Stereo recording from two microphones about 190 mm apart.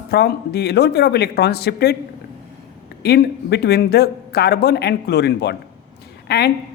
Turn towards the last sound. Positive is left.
turn(degrees=55)  # may be behind; listen again after turning